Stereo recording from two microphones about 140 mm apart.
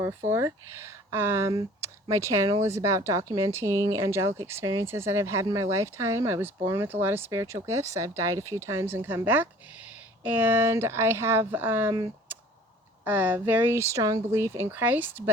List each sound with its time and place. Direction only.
0.3 s speech: 20° right (ahead or behind)